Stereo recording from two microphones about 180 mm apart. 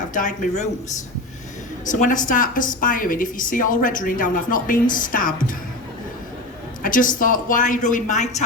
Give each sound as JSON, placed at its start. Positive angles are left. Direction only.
{"t": 0.1, "sound": "a woman's voice", "side_deg": 45}
{"t": 1.9, "sound": "a woman's voice", "side_deg": 45}
{"t": 6.8, "sound": "a woman's voice", "side_deg": 50}